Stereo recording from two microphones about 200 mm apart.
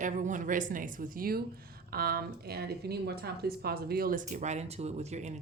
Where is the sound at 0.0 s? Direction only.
40° right (ahead or behind).